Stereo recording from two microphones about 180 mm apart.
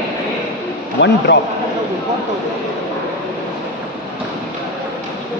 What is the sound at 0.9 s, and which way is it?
Speech, 75° left (ahead or behind).